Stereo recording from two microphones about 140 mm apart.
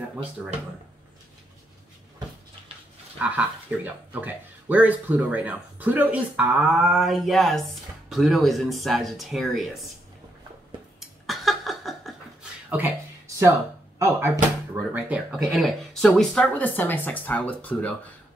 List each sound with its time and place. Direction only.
0.4 s speech: 5° right (ahead or behind)
3.2 s speech: 10° right (ahead or behind)
11.0 s a sound: centre (ahead or behind)
12.6 s a sound: 10° right (ahead or behind)
13.9 s speech: 20° right (ahead or behind)
15.0 s speech: 10° right (ahead or behind); by 17.9 s 10° left (ahead or behind)